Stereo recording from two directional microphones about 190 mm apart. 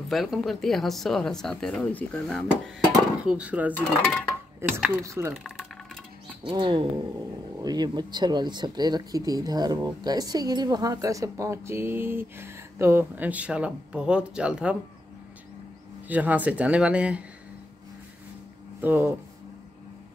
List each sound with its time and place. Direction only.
0.1 s speech: centre (ahead or behind)
6.4 s speech: 25° right (ahead or behind); by 14.8 s 5° right (ahead or behind)
16.1 s speech: 10° right (ahead or behind)
18.8 s speech: 10° right (ahead or behind)